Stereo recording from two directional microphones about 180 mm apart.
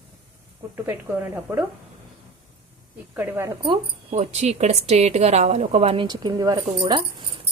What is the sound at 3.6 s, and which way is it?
A woman's voice, 30° right (ahead or behind).